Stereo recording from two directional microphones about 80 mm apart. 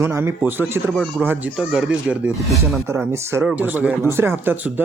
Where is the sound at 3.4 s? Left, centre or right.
Centre.